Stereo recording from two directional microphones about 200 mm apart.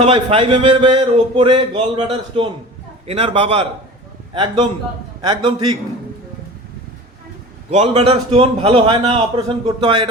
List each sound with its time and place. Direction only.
0.0 s speech: 25° right (ahead or behind)
5.2 s speech: 20° right (ahead or behind)
7.7 s speech: 30° right (ahead or behind)